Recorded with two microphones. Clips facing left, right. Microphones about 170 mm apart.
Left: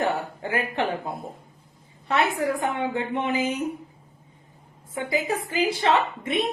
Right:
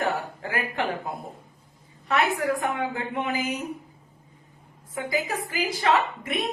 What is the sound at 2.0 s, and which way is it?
A woman's voice, 25° left (ahead or behind).